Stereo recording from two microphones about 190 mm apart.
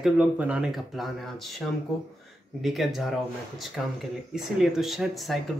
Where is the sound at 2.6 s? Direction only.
Centre (ahead or behind).